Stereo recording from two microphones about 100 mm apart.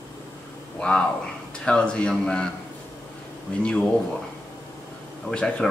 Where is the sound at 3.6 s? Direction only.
10° left (ahead or behind).